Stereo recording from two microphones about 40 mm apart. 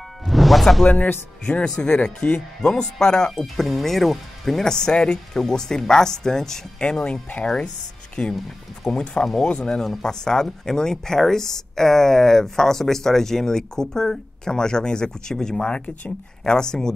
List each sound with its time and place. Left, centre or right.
0.2 s music: centre
1.6 s speech: left
3.3 s speech: centre
4.6 s speech: centre
9.8 s speech: centre